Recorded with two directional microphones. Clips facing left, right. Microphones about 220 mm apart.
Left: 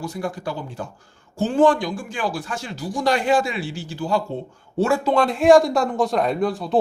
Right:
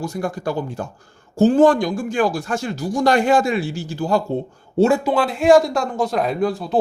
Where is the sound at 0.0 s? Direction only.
45° right (ahead or behind).